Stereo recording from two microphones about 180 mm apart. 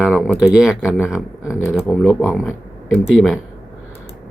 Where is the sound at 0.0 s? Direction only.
Centre (ahead or behind).